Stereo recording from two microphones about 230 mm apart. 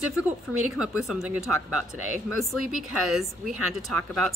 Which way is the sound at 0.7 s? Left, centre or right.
Centre.